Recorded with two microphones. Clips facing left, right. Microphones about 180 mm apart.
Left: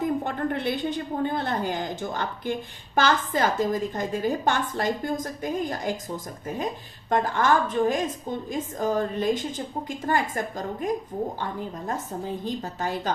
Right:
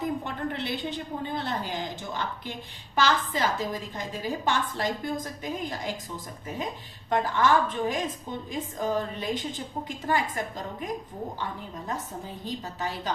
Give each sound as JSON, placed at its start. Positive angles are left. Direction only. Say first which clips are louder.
{"t": 0.0, "sound": "a woman's voice", "louder": "left 4 dB", "side_deg": 50}
{"t": 7.1, "sound": "a woman's voice", "louder": "left 1 dB", "side_deg": 45}
{"t": 12.6, "sound": "a woman's voice", "louder": "left 4 dB", "side_deg": 50}